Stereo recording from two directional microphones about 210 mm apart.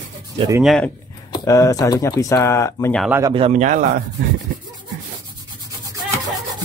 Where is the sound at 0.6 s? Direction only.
Centre (ahead or behind).